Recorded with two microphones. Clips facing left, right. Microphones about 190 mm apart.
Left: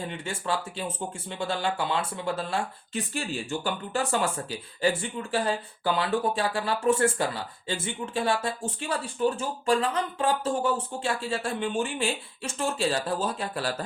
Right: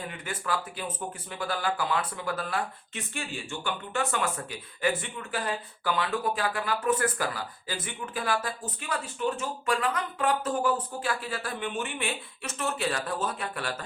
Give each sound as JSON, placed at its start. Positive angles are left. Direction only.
{"t": 0.1, "sound": "speech", "side_deg": 25}